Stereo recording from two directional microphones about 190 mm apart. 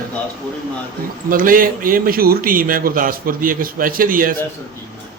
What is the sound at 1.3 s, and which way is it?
A man's voice, 45° right (ahead or behind).